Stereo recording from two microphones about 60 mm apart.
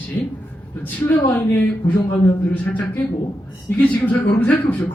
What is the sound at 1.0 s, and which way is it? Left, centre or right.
Speech, left.